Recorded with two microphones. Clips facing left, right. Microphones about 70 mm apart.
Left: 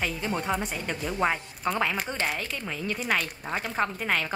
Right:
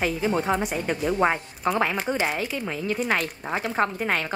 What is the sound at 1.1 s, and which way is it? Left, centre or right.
Speech, right.